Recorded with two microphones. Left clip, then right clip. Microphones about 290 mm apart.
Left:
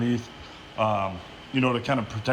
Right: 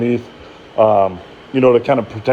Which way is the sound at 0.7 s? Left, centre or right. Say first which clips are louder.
Right 13 dB; right.